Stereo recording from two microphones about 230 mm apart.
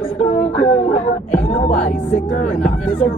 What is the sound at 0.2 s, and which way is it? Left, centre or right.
A woman's voice, left.